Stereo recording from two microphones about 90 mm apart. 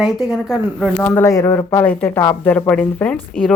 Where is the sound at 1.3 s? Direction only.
40° left (ahead or behind).